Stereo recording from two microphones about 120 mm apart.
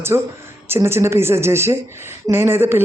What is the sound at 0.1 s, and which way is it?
A woman's voice, 25° right (ahead or behind).